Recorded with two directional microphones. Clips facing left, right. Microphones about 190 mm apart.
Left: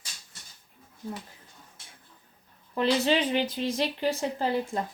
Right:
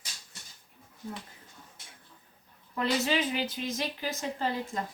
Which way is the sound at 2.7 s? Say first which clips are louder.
Left 4 dB; 30° left (ahead or behind).